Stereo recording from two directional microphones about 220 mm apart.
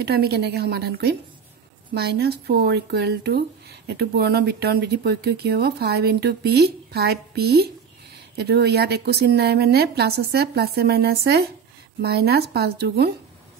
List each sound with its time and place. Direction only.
0.0 s speech: 45° right (ahead or behind)